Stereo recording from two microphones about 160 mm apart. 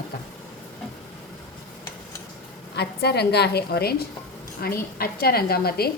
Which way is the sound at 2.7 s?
90° left.